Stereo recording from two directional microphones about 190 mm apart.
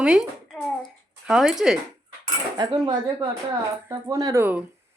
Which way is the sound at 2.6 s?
20° right (ahead or behind).